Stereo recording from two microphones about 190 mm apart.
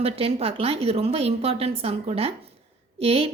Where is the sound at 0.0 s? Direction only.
30° right (ahead or behind).